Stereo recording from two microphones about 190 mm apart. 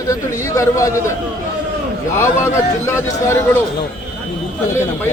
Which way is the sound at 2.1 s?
15° left (ahead or behind).